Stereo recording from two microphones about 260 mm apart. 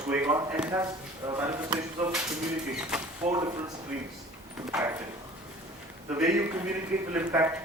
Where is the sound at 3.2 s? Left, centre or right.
Right.